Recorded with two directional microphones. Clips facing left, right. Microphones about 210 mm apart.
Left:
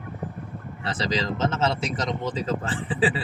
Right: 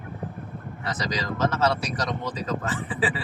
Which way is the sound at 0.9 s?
30° left (ahead or behind).